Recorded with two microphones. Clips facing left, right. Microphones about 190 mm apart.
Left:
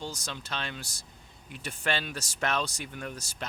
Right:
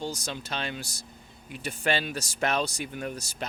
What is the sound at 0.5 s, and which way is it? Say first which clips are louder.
Speech: right 2 dB; 10° right (ahead or behind).